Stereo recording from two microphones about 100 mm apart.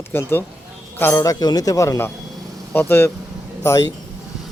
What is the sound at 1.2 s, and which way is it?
Speech, 40° left (ahead or behind).